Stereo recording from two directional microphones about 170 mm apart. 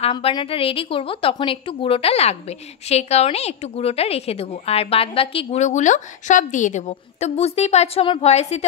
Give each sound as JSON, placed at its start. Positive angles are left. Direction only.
{"t": 0.0, "sound": "a woman's voice", "side_deg": 30}